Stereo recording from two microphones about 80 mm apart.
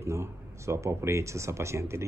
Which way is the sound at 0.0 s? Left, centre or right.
Right.